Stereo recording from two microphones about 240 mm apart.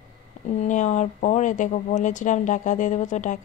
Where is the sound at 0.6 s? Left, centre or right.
Left.